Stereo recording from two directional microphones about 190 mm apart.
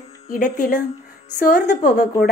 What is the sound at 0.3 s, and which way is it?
A woman's voice, 45° left (ahead or behind).